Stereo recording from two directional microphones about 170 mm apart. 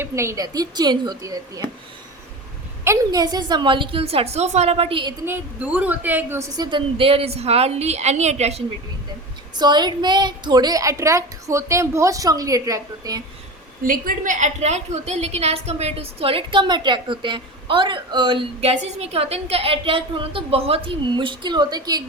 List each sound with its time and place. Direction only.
0.0 s a woman's voice: 15° right (ahead or behind)
2.8 s a woman's voice: 20° right (ahead or behind)
5.2 s a woman's voice: 10° right (ahead or behind)
6.7 s a woman's voice: 30° right (ahead or behind)
9.6 s a woman's voice: 25° right (ahead or behind)
13.8 s a woman's voice: 55° right (ahead or behind); by 22.0 s 25° right (ahead or behind)